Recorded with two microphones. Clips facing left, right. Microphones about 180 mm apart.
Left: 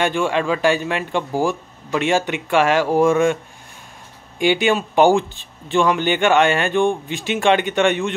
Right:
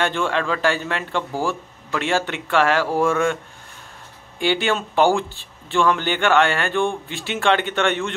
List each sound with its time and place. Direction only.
0.0 s speech: 15° left (ahead or behind)
4.4 s speech: 15° left (ahead or behind)